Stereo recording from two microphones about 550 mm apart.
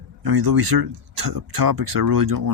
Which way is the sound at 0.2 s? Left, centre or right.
Right.